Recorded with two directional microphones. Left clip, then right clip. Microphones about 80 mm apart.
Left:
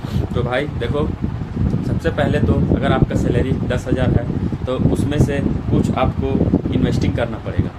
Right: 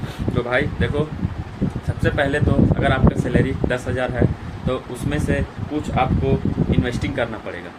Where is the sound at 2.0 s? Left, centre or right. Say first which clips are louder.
Even; left.